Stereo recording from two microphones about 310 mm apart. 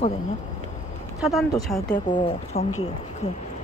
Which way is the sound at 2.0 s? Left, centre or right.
Centre.